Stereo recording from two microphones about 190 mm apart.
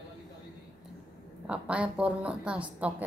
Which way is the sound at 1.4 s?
5° right (ahead or behind).